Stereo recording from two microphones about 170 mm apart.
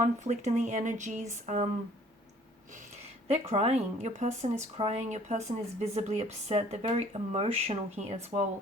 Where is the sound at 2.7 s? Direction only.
45° right (ahead or behind).